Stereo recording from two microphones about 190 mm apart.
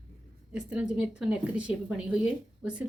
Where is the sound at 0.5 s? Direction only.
5° right (ahead or behind).